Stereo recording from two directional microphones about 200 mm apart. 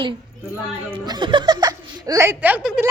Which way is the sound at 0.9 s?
20° right (ahead or behind).